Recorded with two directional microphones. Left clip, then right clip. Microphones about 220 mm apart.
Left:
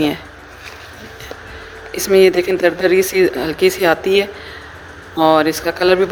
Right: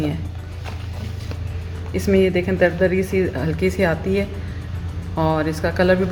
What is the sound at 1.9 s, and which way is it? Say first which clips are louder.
Speech: left 7 dB; 50° left (ahead or behind).